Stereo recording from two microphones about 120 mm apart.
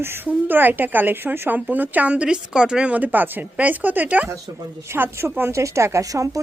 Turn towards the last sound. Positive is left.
turn(degrees=-30)  # may be behind; listen again after turning